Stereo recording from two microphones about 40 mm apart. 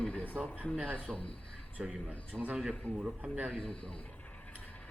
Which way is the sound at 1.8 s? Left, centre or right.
Right.